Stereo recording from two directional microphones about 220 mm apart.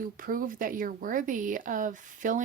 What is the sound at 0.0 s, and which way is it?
Speech, 40° right (ahead or behind).